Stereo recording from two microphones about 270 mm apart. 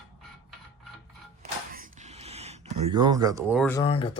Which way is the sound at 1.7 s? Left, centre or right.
Right.